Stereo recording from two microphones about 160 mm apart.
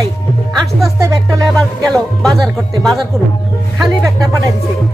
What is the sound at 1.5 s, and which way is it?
Speech, 5° left (ahead or behind).